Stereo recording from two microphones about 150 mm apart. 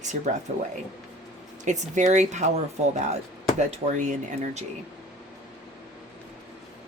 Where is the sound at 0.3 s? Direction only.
55° right (ahead or behind).